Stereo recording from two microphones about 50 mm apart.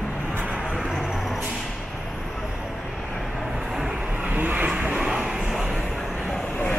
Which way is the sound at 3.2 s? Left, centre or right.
Centre.